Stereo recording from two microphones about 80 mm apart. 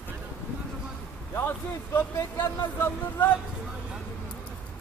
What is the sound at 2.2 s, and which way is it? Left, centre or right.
Speech, left.